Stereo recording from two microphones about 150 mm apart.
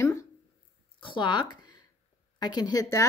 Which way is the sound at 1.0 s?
30° left (ahead or behind).